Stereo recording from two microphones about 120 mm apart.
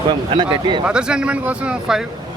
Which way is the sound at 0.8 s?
10° right (ahead or behind).